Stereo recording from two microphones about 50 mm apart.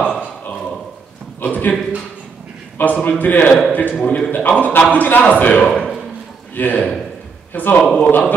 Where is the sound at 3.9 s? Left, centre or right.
Centre.